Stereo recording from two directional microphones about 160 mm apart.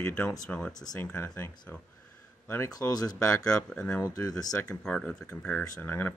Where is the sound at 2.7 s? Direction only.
25° left (ahead or behind).